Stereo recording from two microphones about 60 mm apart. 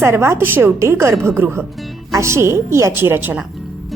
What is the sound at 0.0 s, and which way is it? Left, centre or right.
Speech, right.